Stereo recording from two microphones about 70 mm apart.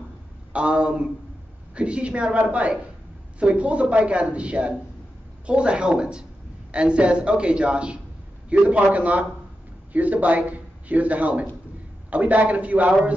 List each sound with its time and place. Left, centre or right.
0.5 s a woman's voice: centre